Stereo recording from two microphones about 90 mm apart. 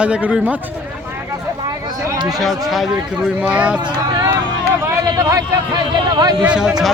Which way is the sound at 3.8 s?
45° right (ahead or behind).